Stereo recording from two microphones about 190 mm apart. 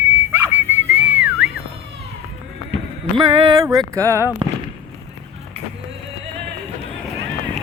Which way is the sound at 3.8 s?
15° right (ahead or behind).